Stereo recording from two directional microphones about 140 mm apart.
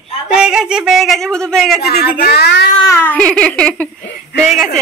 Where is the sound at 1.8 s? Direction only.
90° left.